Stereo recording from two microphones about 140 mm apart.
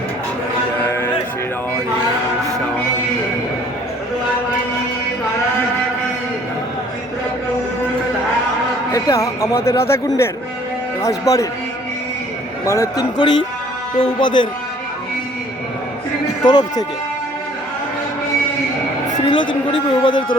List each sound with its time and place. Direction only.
0.9 s music: 15° left (ahead or behind)
8.9 s speech: 25° left (ahead or behind)
11.0 s speech: 25° left (ahead or behind)
12.6 s speech: 20° left (ahead or behind)
13.1 s speech: 35° left (ahead or behind)
16.5 s speech: 30° left (ahead or behind)
19.2 s speech: 35° left (ahead or behind)